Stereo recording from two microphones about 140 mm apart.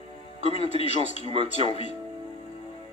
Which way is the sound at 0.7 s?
45° left (ahead or behind).